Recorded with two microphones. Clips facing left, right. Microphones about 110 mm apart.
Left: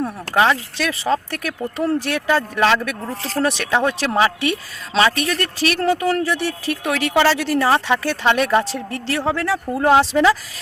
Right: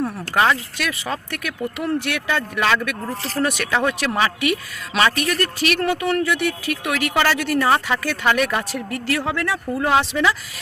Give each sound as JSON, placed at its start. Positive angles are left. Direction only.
{"t": 0.3, "sound": "speech", "side_deg": 30}